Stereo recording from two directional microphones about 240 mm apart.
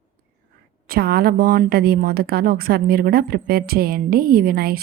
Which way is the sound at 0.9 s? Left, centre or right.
Right.